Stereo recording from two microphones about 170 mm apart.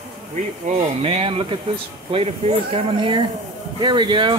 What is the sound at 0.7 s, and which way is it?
Speech, 35° right (ahead or behind).